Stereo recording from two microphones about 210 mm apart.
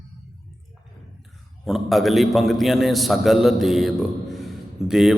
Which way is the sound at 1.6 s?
Centre (ahead or behind).